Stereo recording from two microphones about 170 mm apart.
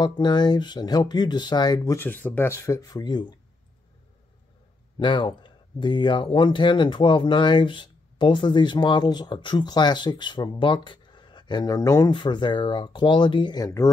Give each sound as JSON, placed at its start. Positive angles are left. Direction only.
{"t": 0.0, "sound": "speech", "side_deg": 25}
{"t": 2.0, "sound": "speech", "side_deg": 10}
{"t": 4.9, "sound": "speech", "side_deg": 30}